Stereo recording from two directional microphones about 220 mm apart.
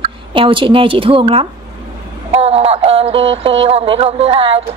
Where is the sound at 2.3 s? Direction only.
30° right (ahead or behind).